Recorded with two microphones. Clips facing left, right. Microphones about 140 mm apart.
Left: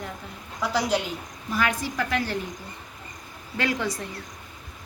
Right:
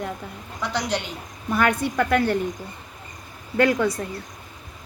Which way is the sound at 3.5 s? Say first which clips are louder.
Right 8 dB; 45° right (ahead or behind).